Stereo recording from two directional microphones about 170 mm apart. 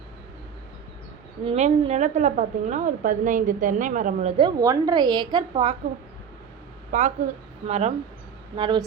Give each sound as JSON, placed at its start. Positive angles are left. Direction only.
{"t": 1.5, "sound": "a woman's voice", "side_deg": -35}
{"t": 4.4, "sound": "a woman's voice", "side_deg": -25}
{"t": 6.9, "sound": "a woman's voice", "side_deg": -45}
{"t": 8.5, "sound": "a woman's voice", "side_deg": -30}